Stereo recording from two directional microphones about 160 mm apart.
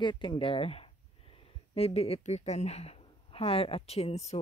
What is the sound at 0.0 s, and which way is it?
A woman's voice, 30° left (ahead or behind).